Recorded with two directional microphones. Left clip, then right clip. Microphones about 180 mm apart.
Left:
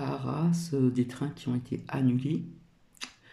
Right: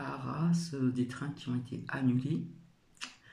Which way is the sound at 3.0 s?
25° left (ahead or behind).